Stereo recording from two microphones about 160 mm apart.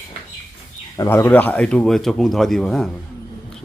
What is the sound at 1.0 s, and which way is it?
Speech, 15° left (ahead or behind).